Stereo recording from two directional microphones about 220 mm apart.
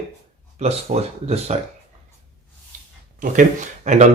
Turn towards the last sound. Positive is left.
turn(degrees=-30)  # may be behind; listen again after turning